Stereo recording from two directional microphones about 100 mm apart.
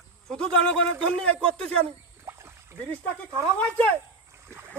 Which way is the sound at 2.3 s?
25° right (ahead or behind).